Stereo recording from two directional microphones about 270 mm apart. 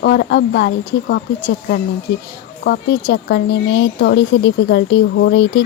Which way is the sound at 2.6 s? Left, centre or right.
Left.